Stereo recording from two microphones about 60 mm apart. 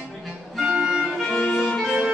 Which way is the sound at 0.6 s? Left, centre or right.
Centre.